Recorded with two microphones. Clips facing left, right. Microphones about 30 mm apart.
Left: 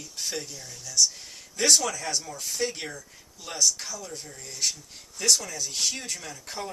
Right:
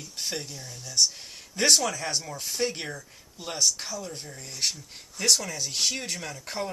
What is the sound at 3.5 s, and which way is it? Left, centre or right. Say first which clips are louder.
Speech: left 1 dB; right.